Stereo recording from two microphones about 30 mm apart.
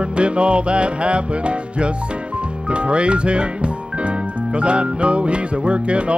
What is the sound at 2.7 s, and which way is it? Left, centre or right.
Speech, right.